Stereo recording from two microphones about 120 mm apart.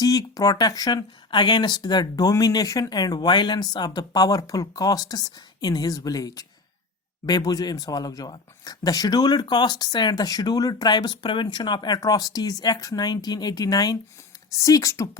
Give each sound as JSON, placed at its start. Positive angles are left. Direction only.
{"t": 0.0, "sound": "speech", "side_deg": 30}